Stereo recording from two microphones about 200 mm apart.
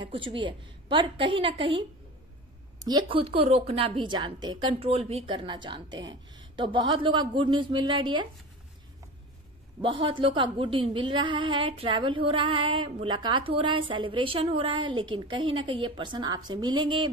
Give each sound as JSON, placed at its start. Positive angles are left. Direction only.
{"t": 0.0, "sound": "a woman's voice", "side_deg": -25}
{"t": 9.8, "sound": "a woman's voice", "side_deg": -25}